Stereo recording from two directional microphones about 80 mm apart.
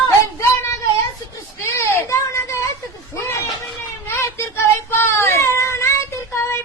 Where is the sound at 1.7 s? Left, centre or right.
Left.